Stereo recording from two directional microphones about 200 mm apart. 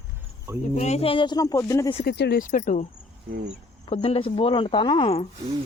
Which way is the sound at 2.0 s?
55° left (ahead or behind).